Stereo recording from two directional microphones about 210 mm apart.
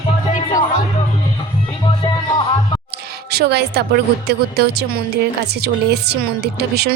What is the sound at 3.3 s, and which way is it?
A woman's voice, 50° right (ahead or behind).